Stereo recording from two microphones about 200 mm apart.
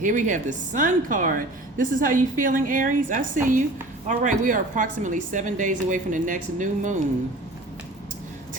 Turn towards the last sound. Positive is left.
turn(degrees=-40)  # may be behind; listen again after turning